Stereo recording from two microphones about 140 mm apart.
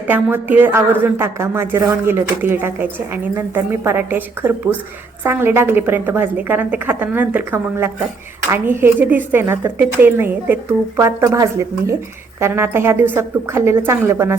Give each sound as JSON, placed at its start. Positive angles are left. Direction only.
{"t": 0.1, "sound": "speech", "side_deg": -15}